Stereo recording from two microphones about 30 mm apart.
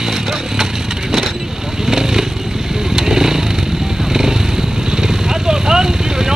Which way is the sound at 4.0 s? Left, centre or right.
Centre.